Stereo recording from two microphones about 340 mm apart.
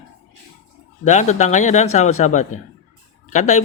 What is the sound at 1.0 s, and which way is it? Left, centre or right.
Speech, left.